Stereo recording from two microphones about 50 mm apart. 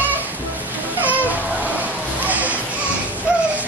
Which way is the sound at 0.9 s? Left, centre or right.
Right.